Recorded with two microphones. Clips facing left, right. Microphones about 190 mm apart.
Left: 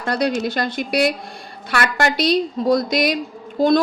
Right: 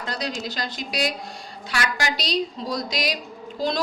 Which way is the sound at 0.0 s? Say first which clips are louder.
Left 9 dB; 60° left (ahead or behind).